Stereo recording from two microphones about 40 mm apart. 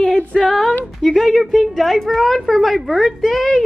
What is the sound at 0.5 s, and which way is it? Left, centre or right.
Female singing, centre.